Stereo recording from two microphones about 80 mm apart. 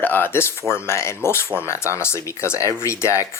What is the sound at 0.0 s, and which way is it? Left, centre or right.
Speech, left.